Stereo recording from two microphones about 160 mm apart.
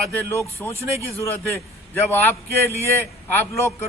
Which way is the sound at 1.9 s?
15° left (ahead or behind).